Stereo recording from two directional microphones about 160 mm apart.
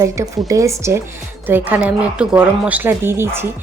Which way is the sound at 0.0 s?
20° right (ahead or behind).